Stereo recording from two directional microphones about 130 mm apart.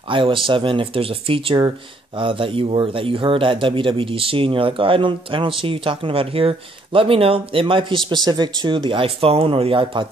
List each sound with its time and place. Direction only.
0.1 s speech: 40° right (ahead or behind)